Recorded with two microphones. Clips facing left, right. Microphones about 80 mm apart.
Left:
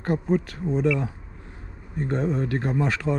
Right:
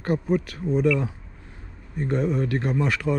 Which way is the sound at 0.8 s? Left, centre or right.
Left.